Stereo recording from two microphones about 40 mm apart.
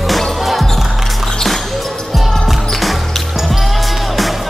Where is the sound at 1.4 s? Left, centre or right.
Centre.